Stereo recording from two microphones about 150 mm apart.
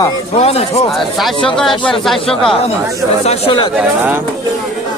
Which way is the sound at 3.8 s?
10° right (ahead or behind).